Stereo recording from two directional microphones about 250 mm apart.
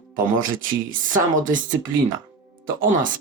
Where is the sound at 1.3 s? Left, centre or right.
Right.